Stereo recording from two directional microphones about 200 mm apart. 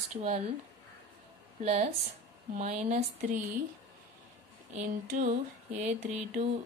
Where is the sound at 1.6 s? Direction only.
35° right (ahead or behind).